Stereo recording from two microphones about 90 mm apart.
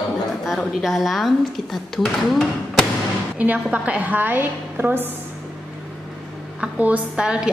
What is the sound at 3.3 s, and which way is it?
A woman's voice, 15° right (ahead or behind).